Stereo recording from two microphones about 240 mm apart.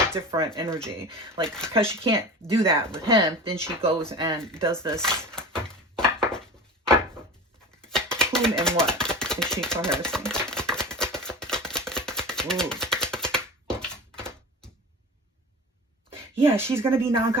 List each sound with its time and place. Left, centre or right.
0.1 s a woman's voice: centre
1.5 s speech: centre
1.9 s a woman's voice: centre
4.0 s a woman's voice: centre
4.9 s chopping: centre
7.8 s a sound: centre
8.8 s chopping: centre
16.5 s a woman's voice: centre